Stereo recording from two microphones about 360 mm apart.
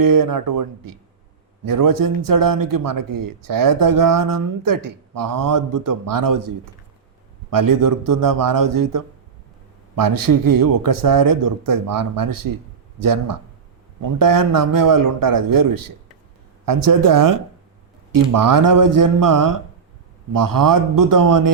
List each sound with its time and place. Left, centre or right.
0.0 s speech: right
7.5 s speech: right